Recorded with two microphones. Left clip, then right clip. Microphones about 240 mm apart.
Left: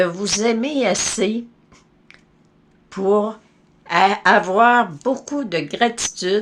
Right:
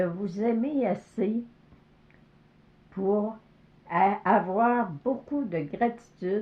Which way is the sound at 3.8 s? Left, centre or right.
Centre.